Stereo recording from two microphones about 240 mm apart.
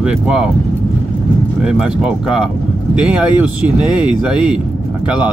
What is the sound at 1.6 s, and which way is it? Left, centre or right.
Speech, centre.